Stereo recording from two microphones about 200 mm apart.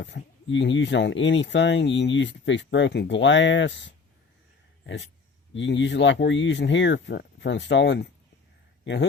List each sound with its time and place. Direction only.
0.0 s speech: 60° left (ahead or behind)
5.5 s speech: 65° left (ahead or behind)